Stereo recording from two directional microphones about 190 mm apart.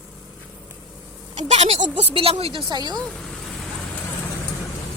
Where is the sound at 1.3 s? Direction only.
35° right (ahead or behind).